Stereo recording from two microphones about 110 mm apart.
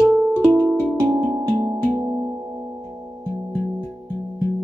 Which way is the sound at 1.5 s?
30° right (ahead or behind).